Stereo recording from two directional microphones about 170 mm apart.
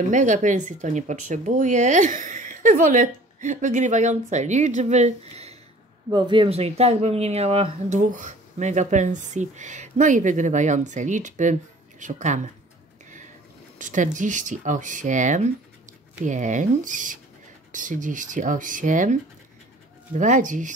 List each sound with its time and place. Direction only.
0.1 s speech: 45° right (ahead or behind)
6.0 s speech: 25° right (ahead or behind); by 12.4 s 45° right (ahead or behind)
13.7 s speech: 50° right (ahead or behind)
20.2 s speech: 45° right (ahead or behind)